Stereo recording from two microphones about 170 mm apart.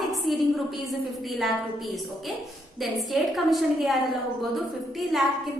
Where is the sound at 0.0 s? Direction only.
Centre (ahead or behind).